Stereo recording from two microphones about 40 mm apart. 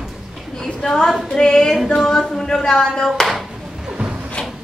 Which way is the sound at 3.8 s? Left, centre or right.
Centre.